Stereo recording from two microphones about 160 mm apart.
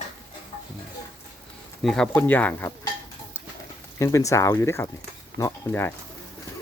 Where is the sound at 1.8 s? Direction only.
Centre (ahead or behind).